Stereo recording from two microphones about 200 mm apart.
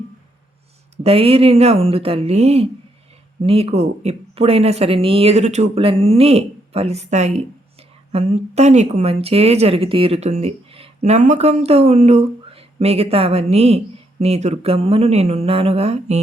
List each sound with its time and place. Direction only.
1.0 s speech: 30° right (ahead or behind)